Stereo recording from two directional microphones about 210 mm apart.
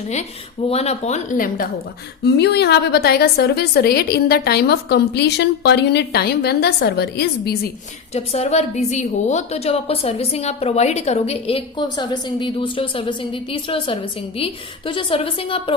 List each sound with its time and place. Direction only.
0.7 s speech: 30° left (ahead or behind)
2.2 s a woman's voice: 50° left (ahead or behind)
8.1 s a woman's voice: 30° left (ahead or behind)